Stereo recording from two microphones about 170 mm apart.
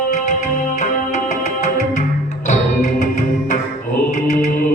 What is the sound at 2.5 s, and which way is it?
Music, 50° left (ahead or behind).